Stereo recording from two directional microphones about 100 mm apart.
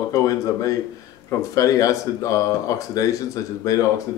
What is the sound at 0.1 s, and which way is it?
Speech, 35° left (ahead or behind).